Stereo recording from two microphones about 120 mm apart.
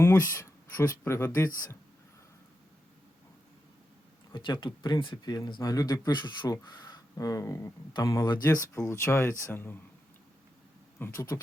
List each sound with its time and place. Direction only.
0.0 s speech: 25° left (ahead or behind)
4.3 s speech: 40° left (ahead or behind); by 9.7 s 20° left (ahead or behind)
11.0 s speech: 25° left (ahead or behind)